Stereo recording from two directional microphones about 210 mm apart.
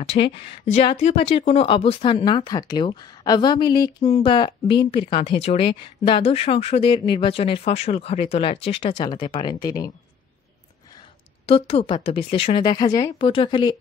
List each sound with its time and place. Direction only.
0.1 s speech: 25° left (ahead or behind)
11.4 s speech: 25° left (ahead or behind)